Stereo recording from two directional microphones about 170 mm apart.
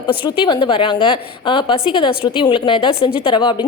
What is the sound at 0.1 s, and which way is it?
A woman's voice, 30° left (ahead or behind).